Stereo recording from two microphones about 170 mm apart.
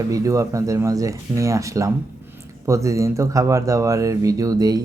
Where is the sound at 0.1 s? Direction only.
20° right (ahead or behind).